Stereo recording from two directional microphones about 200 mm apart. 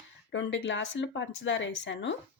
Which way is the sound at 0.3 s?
65° left (ahead or behind).